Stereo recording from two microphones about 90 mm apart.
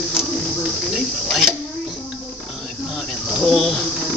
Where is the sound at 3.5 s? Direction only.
Centre (ahead or behind).